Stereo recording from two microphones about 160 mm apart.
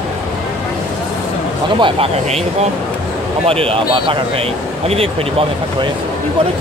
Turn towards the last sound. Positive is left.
turn(degrees=-35)  # may be behind; listen again after turning